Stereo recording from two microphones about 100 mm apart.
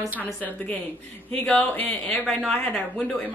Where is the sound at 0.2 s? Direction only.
15° left (ahead or behind).